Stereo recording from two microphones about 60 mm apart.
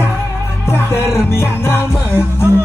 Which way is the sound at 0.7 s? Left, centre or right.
Left.